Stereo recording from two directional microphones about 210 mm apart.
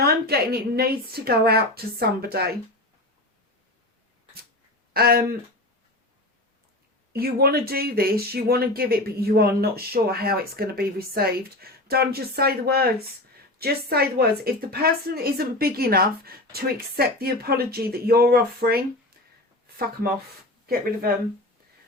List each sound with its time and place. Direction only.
0.0 s speech: 45° right (ahead or behind)
4.9 s speech: 45° right (ahead or behind)
7.1 s speech: 45° right (ahead or behind)